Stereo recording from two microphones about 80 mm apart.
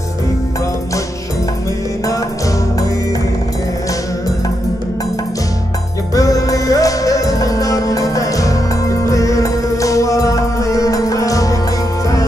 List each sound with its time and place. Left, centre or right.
6.1 s music: left